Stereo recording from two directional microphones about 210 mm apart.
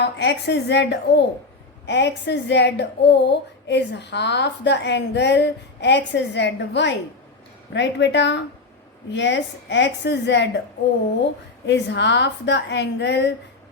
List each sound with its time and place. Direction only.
0.0 s speech: 55° left (ahead or behind)
11.6 s speech: 55° left (ahead or behind)